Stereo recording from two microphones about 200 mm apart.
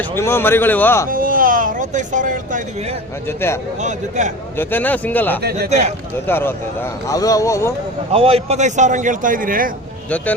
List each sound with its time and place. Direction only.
0.2 s speech: 10° left (ahead or behind)
1.1 s a sound: 45° right (ahead or behind)
3.8 s a man's voice: 35° right (ahead or behind)
4.5 s speech: 10° left (ahead or behind)
5.4 s speech: 55° right (ahead or behind)
6.2 s speech: 10° left (ahead or behind)
8.1 s a man's voice: 30° right (ahead or behind)